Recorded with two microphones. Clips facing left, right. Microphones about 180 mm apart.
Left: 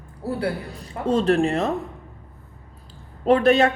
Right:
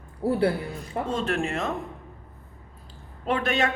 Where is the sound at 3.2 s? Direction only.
40° left (ahead or behind).